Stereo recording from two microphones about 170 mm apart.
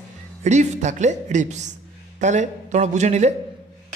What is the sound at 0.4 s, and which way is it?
A woman's voice, 45° right (ahead or behind).